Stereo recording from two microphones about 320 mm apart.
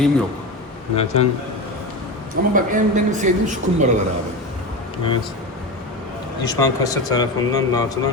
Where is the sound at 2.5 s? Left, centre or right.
Right.